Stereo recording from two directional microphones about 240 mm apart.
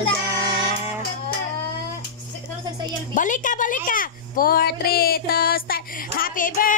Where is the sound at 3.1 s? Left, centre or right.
Left.